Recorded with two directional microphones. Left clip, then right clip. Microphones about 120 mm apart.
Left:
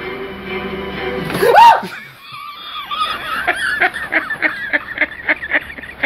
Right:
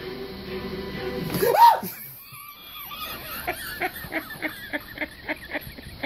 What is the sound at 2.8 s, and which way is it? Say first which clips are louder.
Fowl: left 16 dB; 25° right (ahead or behind).